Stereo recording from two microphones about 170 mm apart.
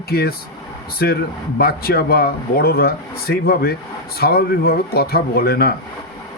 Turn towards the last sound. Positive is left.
turn(degrees=65)  # may be behind; listen again after turning